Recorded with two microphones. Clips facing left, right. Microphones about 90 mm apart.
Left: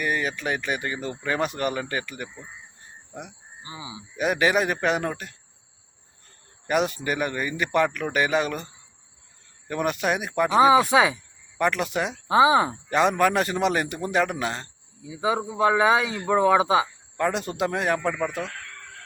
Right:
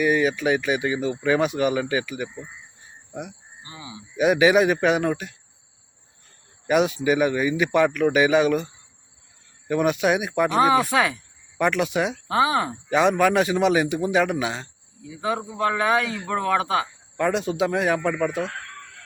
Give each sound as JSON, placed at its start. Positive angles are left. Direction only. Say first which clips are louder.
{"t": 0.0, "sound": "speech", "louder": "right 6 dB", "side_deg": -5}
{"t": 2.4, "sound": "crow", "louder": "right 3 dB", "side_deg": 0}
{"t": 3.6, "sound": "a sound", "louder": "left 2 dB", "side_deg": 15}
{"t": 4.2, "sound": "speech", "louder": "right 5 dB", "side_deg": -5}
{"t": 6.7, "sound": "speech", "louder": "right 4 dB", "side_deg": 0}
{"t": 10.6, "sound": "speech", "louder": "left 3 dB", "side_deg": 10}
{"t": 11.5, "sound": "speech", "louder": "right 2 dB", "side_deg": 0}
{"t": 12.3, "sound": "speech", "louder": "left 5 dB", "side_deg": 20}
{"t": 12.9, "sound": "speech", "louder": "right 3 dB", "side_deg": 0}
{"t": 15.0, "sound": "speech", "louder": "left 1 dB", "side_deg": 10}
{"t": 17.2, "sound": "speech", "louder": "right 3 dB", "side_deg": 0}